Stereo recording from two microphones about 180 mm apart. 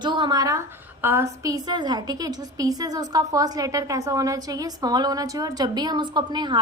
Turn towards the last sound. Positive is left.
turn(degrees=-25)  # may be behind; listen again after turning